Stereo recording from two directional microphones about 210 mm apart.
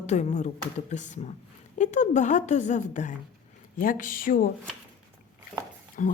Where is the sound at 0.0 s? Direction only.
35° left (ahead or behind).